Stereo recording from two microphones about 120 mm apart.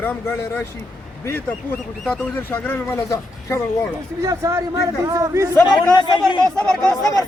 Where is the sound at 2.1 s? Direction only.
15° left (ahead or behind).